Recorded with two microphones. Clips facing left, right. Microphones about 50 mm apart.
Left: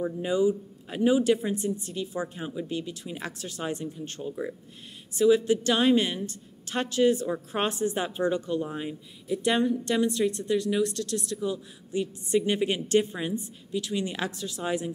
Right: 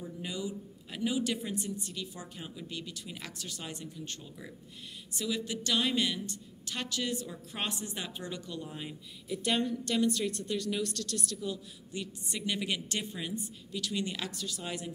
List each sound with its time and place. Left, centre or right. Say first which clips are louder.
0.2 s a woman's voice: left 13 dB; left